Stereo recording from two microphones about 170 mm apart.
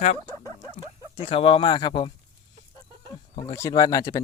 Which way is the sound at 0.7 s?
35° left (ahead or behind).